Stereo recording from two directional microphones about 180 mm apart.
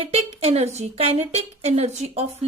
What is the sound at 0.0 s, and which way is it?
Speech, 35° right (ahead or behind).